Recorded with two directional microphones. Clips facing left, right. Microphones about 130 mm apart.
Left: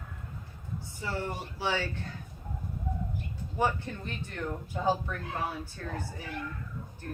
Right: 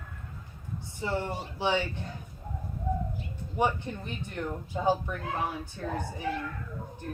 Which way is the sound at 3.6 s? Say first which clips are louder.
Right 2 dB; 20° right (ahead or behind).